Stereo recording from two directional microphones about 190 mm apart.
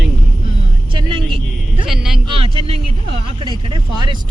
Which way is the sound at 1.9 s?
Centre (ahead or behind).